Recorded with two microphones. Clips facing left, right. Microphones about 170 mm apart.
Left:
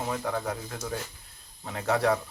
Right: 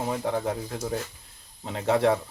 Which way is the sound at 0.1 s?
20° right (ahead or behind).